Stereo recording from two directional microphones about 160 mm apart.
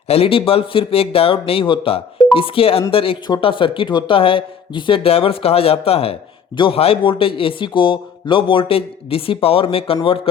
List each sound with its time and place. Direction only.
0.1 s speech: 35° left (ahead or behind)